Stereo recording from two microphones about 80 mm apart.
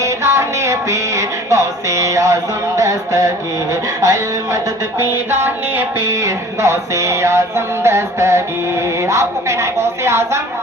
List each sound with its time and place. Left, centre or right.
0.0 s music: right
4.9 s music: right